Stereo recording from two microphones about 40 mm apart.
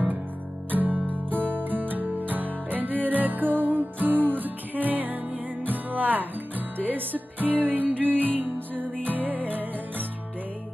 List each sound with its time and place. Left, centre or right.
0.7 s music: right